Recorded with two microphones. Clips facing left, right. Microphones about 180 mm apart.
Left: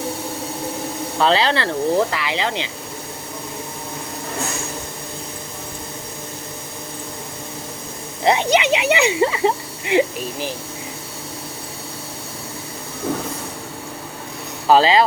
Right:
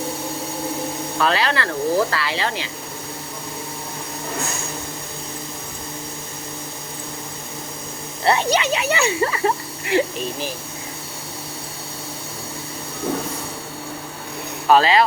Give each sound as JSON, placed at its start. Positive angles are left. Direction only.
{"t": 1.2, "sound": "speech", "side_deg": 25}
{"t": 8.2, "sound": "speech", "side_deg": 20}
{"t": 14.7, "sound": "speech", "side_deg": 25}